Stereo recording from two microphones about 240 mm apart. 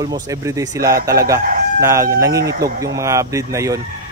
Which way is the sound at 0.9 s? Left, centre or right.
Right.